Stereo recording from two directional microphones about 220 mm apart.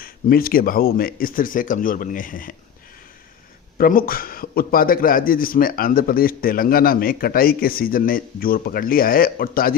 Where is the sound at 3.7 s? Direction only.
40° left (ahead or behind).